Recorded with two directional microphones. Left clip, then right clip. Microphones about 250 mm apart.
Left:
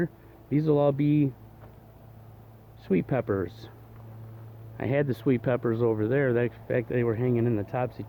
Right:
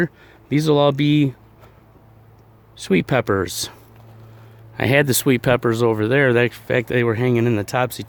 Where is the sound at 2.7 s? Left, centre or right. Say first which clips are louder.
Right 9 dB; right.